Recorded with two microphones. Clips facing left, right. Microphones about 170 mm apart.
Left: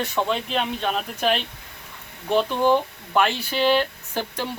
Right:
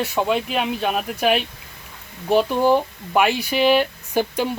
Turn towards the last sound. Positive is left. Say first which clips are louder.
# right 7 dB
turn(degrees=-10)  # may be behind; listen again after turning